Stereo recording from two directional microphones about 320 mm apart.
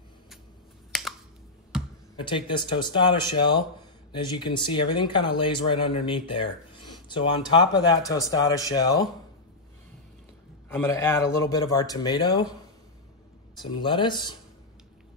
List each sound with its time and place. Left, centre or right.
0.9 s computer keyboard: centre
2.1 s speech: centre
10.7 s speech: centre
13.8 s speech: centre